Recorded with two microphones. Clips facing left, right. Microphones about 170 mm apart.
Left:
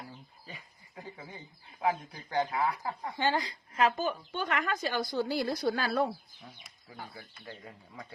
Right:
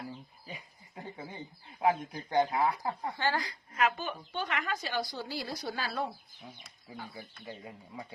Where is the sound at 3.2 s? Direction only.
20° left (ahead or behind); by 6.1 s 55° left (ahead or behind).